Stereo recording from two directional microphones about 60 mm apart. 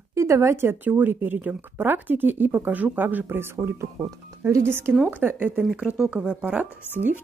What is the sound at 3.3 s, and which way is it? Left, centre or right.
Speech, right.